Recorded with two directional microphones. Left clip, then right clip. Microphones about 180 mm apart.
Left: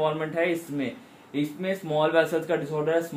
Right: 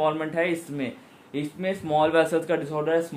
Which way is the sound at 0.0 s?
55° right (ahead or behind).